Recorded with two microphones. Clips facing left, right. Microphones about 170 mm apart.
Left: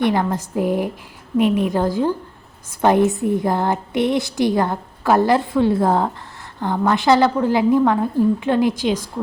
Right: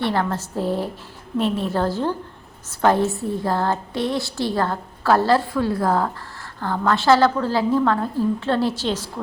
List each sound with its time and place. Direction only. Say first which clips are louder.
0.0 s a woman's voice: left 4 dB; 15° left (ahead or behind)